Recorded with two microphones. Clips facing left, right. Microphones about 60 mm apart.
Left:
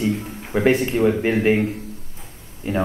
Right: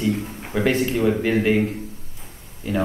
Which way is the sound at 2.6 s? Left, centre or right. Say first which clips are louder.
Left 1 dB; left.